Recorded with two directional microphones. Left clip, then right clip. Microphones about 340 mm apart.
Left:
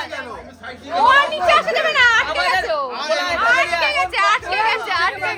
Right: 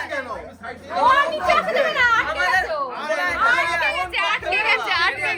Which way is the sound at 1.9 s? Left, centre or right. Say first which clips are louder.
Left 7 dB; left.